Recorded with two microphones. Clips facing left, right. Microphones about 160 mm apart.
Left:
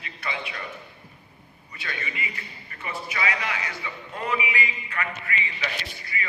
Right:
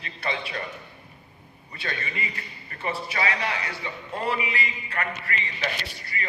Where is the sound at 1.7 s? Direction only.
35° right (ahead or behind).